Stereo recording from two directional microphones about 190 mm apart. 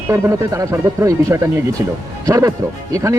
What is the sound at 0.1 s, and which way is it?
Speech, 15° right (ahead or behind).